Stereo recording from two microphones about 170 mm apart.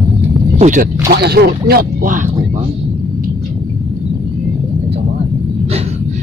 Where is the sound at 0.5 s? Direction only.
45° right (ahead or behind).